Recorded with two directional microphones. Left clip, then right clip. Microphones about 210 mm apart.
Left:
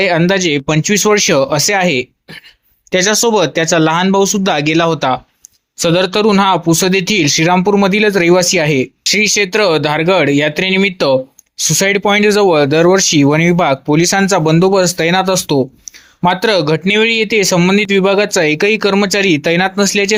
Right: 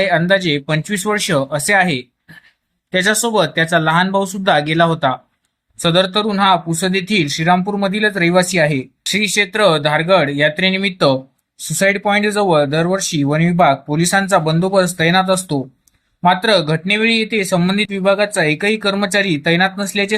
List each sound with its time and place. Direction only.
0.0 s speech: 40° left (ahead or behind)